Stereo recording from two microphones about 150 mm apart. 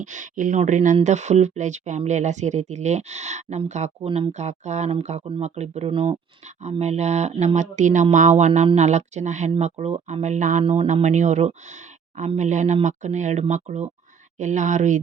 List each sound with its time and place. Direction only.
0.0 s speech: 55° right (ahead or behind); by 6.1 s 35° right (ahead or behind)
6.6 s speech: 50° right (ahead or behind)
10.6 s speech: 40° right (ahead or behind); by 15.0 s 55° right (ahead or behind)